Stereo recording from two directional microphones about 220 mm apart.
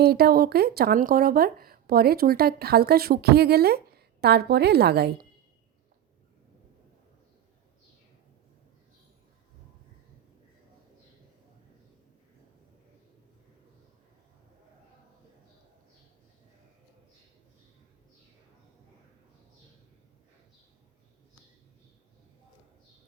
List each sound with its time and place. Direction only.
0.0 s speech: 45° right (ahead or behind)